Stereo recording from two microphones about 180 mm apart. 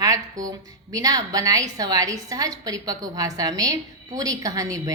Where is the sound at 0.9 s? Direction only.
20° right (ahead or behind).